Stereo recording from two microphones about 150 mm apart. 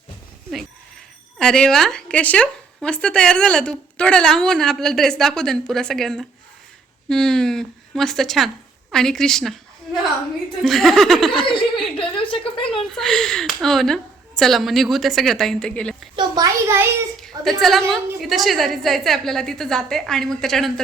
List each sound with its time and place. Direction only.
1.4 s a woman's voice: 5° left (ahead or behind)
12.3 s speech: 35° left (ahead or behind)
12.9 s speech: 5° left (ahead or behind)
16.1 s a child's voice: 25° right (ahead or behind)
17.2 s a sound: 5° left (ahead or behind)
17.6 s speech: centre (ahead or behind)